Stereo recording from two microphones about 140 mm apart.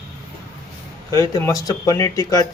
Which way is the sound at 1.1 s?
25° left (ahead or behind).